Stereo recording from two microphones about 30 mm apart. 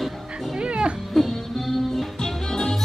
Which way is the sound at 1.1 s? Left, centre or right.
Centre.